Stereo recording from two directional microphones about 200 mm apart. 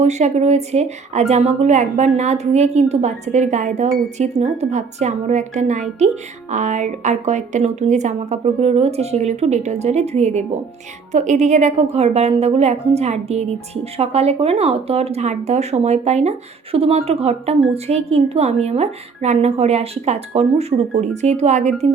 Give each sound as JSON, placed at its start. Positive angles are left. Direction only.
{"t": 0.0, "sound": "speech", "side_deg": -35}